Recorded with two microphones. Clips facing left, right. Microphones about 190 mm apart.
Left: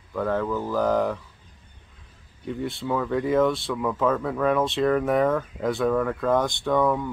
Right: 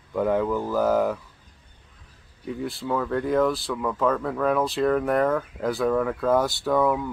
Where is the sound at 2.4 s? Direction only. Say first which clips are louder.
Left 1 dB; centre (ahead or behind).